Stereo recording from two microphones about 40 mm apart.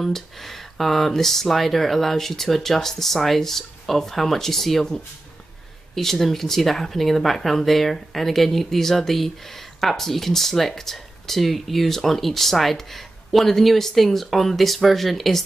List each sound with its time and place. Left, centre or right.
0.0 s speech: centre